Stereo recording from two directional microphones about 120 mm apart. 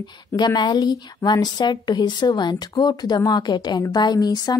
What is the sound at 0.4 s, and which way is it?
A woman's voice, 40° left (ahead or behind).